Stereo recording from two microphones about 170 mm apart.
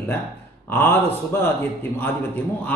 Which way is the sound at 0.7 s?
15° left (ahead or behind).